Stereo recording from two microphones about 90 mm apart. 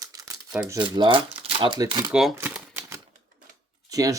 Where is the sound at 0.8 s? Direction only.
65° right (ahead or behind); by 1.8 s 80° right.